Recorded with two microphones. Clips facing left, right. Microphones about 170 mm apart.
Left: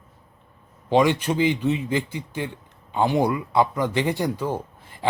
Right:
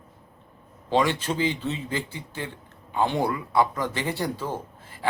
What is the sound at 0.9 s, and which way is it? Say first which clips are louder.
Speech: left 4 dB; 15° left (ahead or behind).